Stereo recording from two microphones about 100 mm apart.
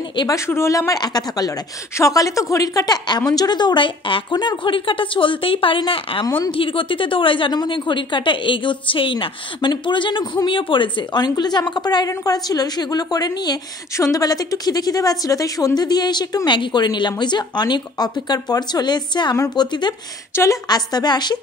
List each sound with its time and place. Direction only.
0.3 s a woman's voice: 30° left (ahead or behind); by 21.4 s 45° left (ahead or behind)